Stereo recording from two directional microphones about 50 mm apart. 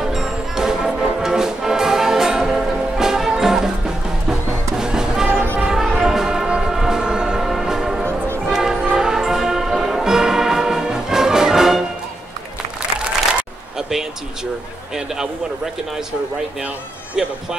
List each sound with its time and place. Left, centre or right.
0.0 s music: centre
6.0 s train: centre
7.4 s train horn: centre
8.5 s music: centre
13.7 s a sound: centre
17.1 s music: centre